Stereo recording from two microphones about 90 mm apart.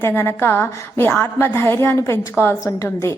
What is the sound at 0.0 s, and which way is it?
A woman's voice, 30° left (ahead or behind).